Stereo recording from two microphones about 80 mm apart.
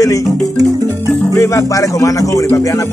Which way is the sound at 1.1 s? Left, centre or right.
Left.